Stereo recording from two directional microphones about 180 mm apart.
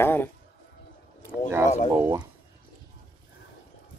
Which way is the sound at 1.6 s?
40° left (ahead or behind).